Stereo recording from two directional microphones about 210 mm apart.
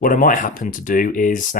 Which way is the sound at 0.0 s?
40° left (ahead or behind).